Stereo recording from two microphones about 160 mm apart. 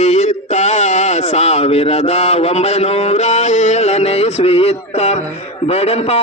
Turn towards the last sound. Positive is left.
turn(degrees=40)  # may be behind; listen again after turning